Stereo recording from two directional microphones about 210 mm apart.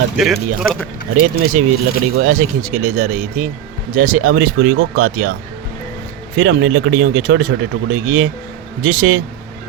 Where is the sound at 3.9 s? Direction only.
40° right (ahead or behind).